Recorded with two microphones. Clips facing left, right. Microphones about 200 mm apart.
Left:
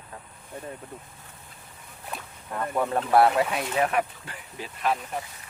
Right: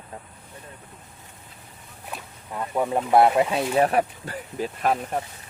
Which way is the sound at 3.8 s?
35° right (ahead or behind).